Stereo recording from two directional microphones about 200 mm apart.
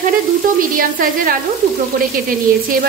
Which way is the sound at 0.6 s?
45° right (ahead or behind).